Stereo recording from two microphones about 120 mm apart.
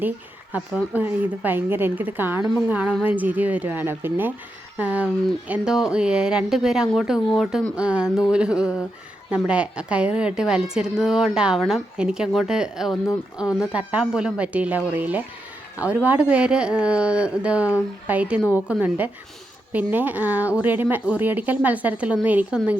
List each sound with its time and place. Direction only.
0.5 s a woman's voice: 15° right (ahead or behind)